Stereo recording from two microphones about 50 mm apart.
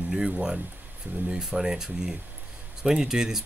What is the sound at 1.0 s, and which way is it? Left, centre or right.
Speech, right.